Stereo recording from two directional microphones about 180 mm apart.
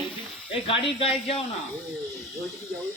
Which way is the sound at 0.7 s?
30° left (ahead or behind).